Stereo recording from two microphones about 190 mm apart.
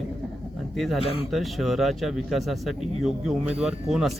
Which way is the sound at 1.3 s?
Centre (ahead or behind).